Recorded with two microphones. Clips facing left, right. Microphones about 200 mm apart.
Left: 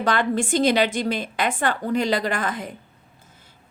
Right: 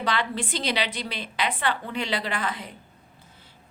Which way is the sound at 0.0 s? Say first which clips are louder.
Left 6 dB; 50° left (ahead or behind).